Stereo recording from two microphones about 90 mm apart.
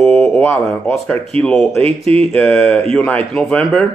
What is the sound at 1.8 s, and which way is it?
Speech, 90° right.